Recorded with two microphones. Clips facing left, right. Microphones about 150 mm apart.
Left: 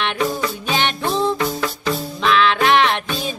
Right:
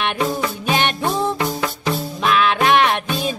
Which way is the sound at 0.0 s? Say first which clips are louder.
Even; 10° right (ahead or behind).